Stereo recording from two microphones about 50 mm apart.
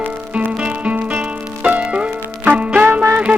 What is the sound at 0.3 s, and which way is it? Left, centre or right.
Music, right.